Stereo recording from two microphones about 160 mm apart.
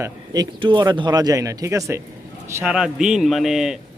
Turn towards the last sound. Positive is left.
turn(degrees=0)  # may be behind; listen again after turning